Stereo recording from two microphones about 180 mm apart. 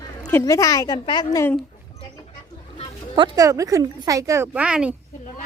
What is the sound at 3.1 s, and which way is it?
Speech, 25° right (ahead or behind).